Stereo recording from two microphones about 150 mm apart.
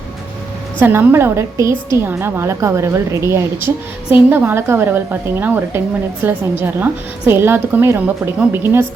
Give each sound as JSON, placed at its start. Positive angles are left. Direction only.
{"t": 0.8, "sound": "a woman's voice", "side_deg": -15}